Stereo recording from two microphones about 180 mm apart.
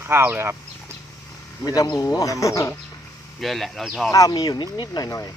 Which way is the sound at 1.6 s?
20° left (ahead or behind).